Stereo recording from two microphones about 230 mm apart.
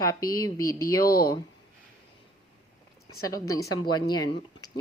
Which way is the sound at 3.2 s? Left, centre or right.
Centre.